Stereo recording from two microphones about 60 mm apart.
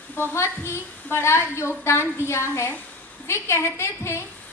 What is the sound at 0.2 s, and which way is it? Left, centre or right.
A woman's voice, left.